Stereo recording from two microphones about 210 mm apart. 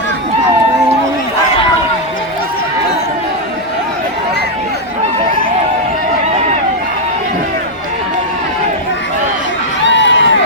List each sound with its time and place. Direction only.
9.8 s crowd: 60° left (ahead or behind)